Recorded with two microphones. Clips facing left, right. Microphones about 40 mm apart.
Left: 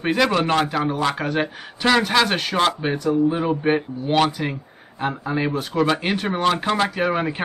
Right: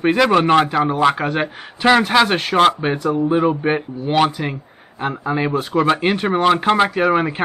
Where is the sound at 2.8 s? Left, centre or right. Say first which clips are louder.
Right 4 dB; right.